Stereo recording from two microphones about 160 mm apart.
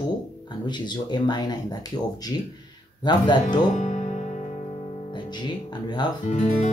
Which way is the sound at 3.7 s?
50° left (ahead or behind).